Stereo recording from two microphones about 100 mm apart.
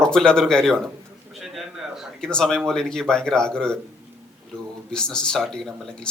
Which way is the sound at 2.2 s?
5° left (ahead or behind).